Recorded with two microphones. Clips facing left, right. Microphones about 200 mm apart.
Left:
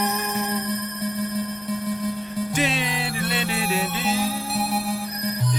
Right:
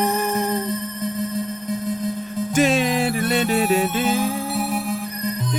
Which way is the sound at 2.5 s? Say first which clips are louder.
Right 9 dB; 45° right (ahead or behind).